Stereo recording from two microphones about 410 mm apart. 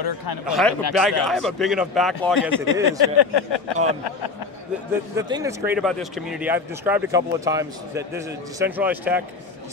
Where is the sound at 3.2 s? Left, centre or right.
Left.